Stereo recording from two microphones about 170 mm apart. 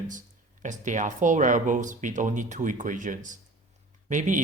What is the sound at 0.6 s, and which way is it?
Speech, 45° right (ahead or behind).